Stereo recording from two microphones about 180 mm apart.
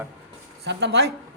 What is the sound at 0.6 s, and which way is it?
Speech, 70° right (ahead or behind).